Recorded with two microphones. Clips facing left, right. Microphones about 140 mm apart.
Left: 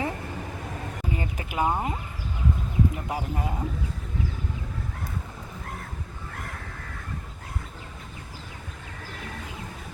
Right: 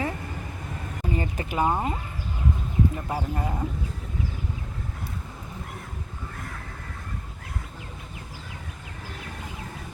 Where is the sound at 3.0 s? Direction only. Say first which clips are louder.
Right 1 dB; 15° left (ahead or behind).